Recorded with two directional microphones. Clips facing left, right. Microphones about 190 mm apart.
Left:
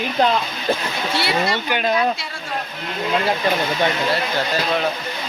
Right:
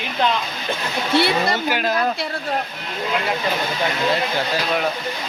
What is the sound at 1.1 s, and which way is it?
Speech, 55° right (ahead or behind).